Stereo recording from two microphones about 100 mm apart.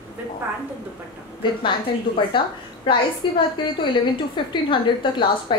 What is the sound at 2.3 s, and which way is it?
A woman's voice, 55° left (ahead or behind).